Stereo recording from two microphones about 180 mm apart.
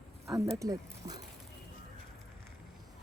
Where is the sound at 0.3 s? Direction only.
20° right (ahead or behind).